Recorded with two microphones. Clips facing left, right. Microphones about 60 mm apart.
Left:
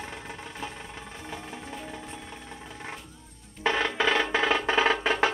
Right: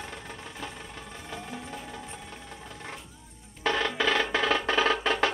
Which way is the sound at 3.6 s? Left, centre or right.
Centre.